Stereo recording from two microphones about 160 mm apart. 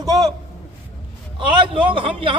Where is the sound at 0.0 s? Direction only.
25° right (ahead or behind).